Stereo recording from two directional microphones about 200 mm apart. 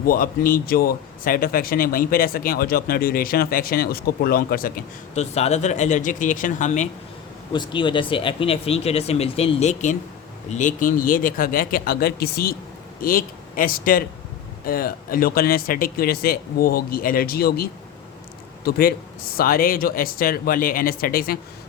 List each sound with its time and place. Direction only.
0.0 s a man's voice: 45° left (ahead or behind)
7.5 s a man's voice: 25° left (ahead or behind); by 21.3 s 45° left (ahead or behind)